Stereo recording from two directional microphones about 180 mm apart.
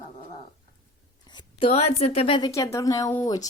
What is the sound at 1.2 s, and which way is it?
A woman's voice, 25° left (ahead or behind).